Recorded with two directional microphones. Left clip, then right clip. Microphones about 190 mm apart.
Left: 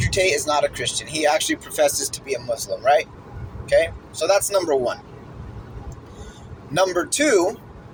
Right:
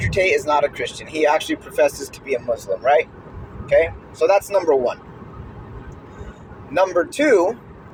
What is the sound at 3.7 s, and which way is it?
Speech, 25° left (ahead or behind).